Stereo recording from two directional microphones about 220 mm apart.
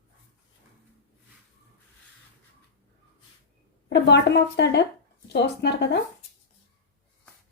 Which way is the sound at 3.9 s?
50° left (ahead or behind).